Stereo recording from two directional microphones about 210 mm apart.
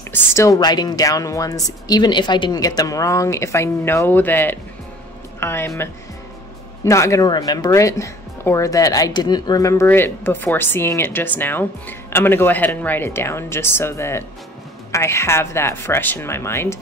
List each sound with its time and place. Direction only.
0.1 s speech: 10° left (ahead or behind)
6.8 s speech: 15° left (ahead or behind)